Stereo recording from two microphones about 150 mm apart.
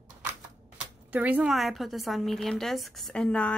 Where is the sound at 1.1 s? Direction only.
10° right (ahead or behind).